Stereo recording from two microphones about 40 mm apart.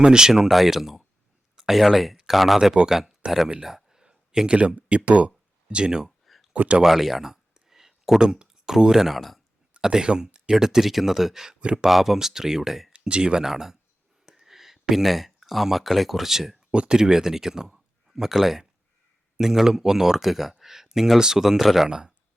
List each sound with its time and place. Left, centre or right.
0.0 s speech: centre
3.6 s a sound: centre
4.5 s speech: right
6.1 s a sound: centre
6.5 s speech: right
6.8 s a sound: centre
8.2 s speech: centre
9.8 s speech: centre
11.6 s speech: centre
11.9 s speech: centre
12.9 s speech: right
13.4 s speech: centre
16.7 s speech: right; by 21.8 s centre
21.8 s speech: centre